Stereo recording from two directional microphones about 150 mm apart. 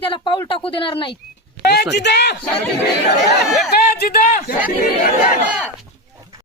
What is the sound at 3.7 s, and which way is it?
Speech, 90° left.